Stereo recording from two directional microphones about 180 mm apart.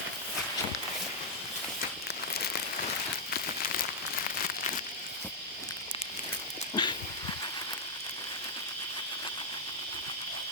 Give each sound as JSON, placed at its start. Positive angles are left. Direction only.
{"t": 6.7, "sound": "dog", "side_deg": 25}